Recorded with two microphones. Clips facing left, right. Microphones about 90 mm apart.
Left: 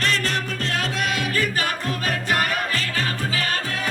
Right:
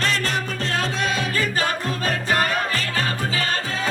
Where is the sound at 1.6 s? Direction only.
35° right (ahead or behind).